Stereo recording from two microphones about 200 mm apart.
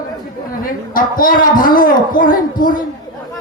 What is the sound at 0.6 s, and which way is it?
A man's voice, 45° left (ahead or behind).